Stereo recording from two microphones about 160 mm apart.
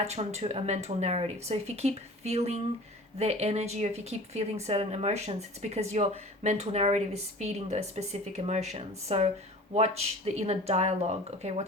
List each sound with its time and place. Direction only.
0.0 s speech: 45° right (ahead or behind)